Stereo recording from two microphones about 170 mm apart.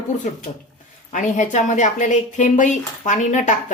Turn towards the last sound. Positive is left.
turn(degrees=45)  # may be behind; listen again after turning